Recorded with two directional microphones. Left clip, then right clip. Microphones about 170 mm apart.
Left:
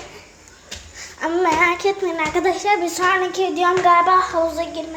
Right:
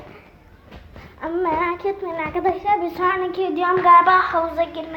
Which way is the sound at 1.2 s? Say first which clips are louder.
Left 4 dB; 20° left (ahead or behind).